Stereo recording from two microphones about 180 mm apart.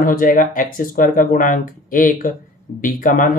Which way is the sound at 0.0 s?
50° left (ahead or behind).